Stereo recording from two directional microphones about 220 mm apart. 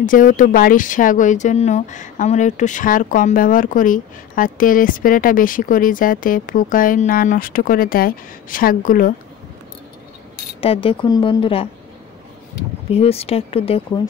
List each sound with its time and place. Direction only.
0.0 s speech: 35° left (ahead or behind)
10.6 s speech: 25° left (ahead or behind)
12.9 s speech: 25° left (ahead or behind)